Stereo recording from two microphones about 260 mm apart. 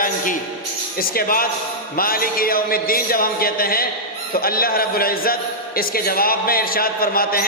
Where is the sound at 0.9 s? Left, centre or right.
Left.